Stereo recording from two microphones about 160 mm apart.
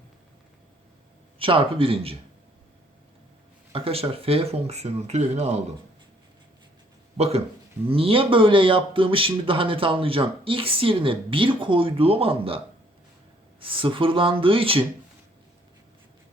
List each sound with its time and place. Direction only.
1.4 s speech: 35° right (ahead or behind)
3.7 s speech: 35° right (ahead or behind)
7.2 s speech: 40° right (ahead or behind)